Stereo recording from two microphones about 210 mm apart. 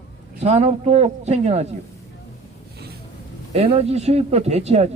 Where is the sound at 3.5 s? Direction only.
30° right (ahead or behind).